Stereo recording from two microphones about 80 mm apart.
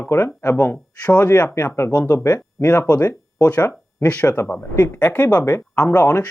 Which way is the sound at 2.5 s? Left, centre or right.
Left.